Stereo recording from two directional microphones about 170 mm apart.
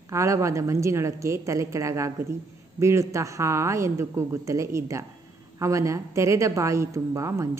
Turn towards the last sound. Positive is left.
turn(degrees=-15)  # may be behind; listen again after turning